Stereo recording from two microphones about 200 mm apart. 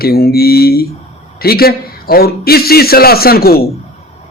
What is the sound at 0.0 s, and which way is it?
A man's voice, 50° left (ahead or behind).